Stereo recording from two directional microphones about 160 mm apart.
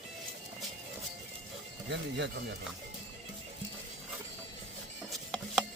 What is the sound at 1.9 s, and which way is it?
Speech, 90° right.